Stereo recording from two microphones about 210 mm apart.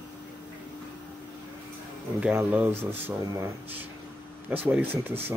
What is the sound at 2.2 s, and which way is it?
Speech, 5° right (ahead or behind).